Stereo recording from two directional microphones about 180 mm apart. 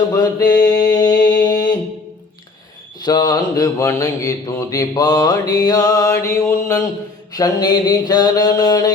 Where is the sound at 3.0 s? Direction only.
20° left (ahead or behind).